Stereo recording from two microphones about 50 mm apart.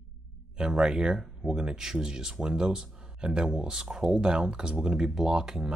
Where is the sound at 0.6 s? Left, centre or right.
Centre.